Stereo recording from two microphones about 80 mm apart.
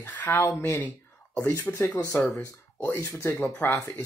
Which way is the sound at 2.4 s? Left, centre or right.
Left.